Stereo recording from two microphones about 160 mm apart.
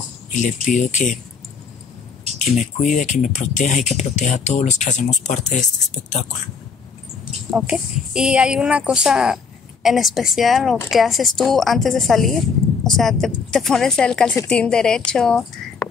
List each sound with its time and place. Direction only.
0.3 s speech: 50° left (ahead or behind)
2.3 s speech: 50° left (ahead or behind)
7.5 s a woman's voice: 5° right (ahead or behind)